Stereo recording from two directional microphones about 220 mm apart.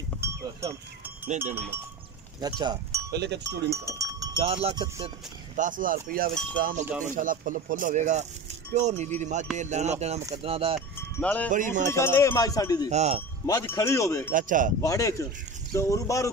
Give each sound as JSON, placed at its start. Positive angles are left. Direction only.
{"t": 0.2, "sound": "sheep", "side_deg": -15}
{"t": 2.4, "sound": "speech", "side_deg": -20}
{"t": 3.1, "sound": "speech", "side_deg": -50}
{"t": 3.4, "sound": "speech", "side_deg": -15}
{"t": 4.4, "sound": "speech", "side_deg": -25}
{"t": 5.6, "sound": "speech", "side_deg": -35}
{"t": 11.1, "sound": "cowbell", "side_deg": 5}
{"t": 11.5, "sound": "speech", "side_deg": -35}
{"t": 11.9, "sound": "cowbell", "side_deg": 10}
{"t": 12.9, "sound": "speech", "side_deg": -30}
{"t": 13.5, "sound": "cowbell", "side_deg": 15}
{"t": 14.3, "sound": "speech", "side_deg": -35}
{"t": 14.8, "sound": "cowbell", "side_deg": 15}